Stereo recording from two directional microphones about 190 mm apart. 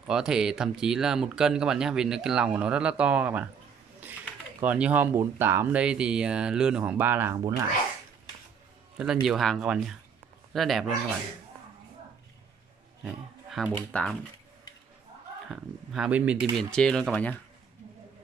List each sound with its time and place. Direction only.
0.1 s speech: 5° right (ahead or behind)
4.0 s a sound: 10° right (ahead or behind)
4.6 s speech: 5° right (ahead or behind)
8.9 s speech: 5° right (ahead or behind)
13.0 s a man's voice: centre (ahead or behind)
15.5 s speech: 5° right (ahead or behind)